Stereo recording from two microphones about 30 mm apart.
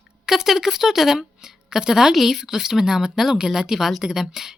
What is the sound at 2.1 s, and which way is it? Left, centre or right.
A woman's voice, centre.